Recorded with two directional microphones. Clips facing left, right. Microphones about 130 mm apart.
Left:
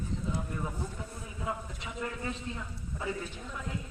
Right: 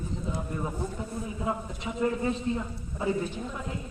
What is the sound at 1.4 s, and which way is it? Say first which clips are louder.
A man's voice: right 3 dB; 30° right (ahead or behind).